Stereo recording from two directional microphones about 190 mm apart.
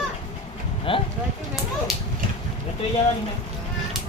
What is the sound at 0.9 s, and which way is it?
Speech, 30° left (ahead or behind).